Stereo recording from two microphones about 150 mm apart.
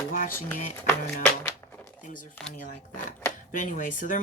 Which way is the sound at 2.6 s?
55° left (ahead or behind).